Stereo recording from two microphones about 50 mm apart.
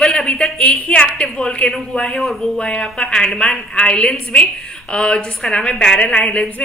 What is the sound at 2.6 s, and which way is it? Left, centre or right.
A woman's voice, centre.